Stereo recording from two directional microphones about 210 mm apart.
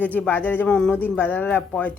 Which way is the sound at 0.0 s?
5° left (ahead or behind).